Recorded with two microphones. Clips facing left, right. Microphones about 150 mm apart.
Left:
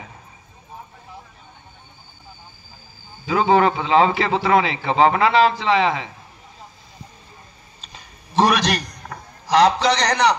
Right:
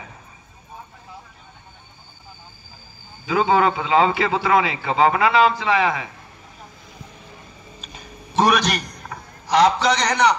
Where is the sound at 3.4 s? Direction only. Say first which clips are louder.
Left 3 dB; 30° left (ahead or behind).